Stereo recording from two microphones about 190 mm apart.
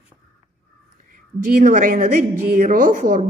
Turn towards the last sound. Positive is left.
turn(degrees=-45)  # may be behind; listen again after turning